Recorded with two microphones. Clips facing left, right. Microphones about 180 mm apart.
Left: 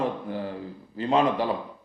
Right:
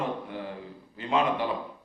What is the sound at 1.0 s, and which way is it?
Speech, 35° left (ahead or behind).